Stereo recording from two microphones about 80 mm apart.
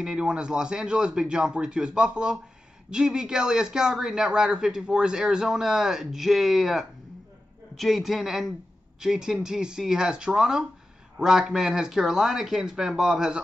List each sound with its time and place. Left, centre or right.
0.0 s a man's voice: centre